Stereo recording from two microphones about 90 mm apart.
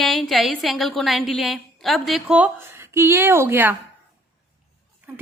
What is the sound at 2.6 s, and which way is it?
A woman's voice, 30° right (ahead or behind).